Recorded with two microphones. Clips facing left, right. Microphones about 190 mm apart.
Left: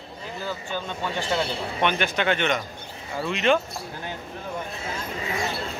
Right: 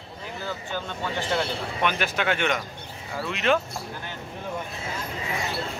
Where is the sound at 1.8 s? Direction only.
5° right (ahead or behind).